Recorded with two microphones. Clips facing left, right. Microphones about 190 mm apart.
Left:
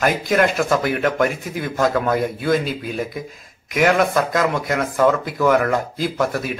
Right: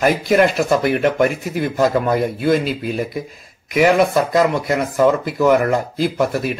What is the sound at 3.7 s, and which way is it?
Speech, centre (ahead or behind).